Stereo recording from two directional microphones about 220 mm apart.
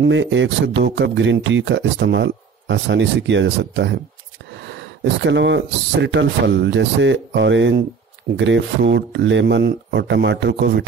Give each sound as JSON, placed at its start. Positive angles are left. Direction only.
{"t": 0.0, "sound": "speech", "side_deg": -55}
{"t": 5.0, "sound": "speech", "side_deg": -55}